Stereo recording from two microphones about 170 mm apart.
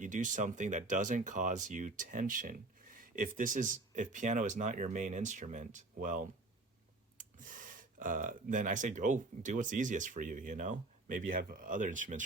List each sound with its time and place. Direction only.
0.0 s speech: 50° right (ahead or behind)